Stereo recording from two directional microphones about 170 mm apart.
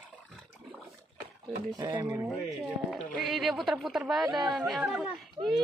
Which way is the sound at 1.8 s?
20° right (ahead or behind).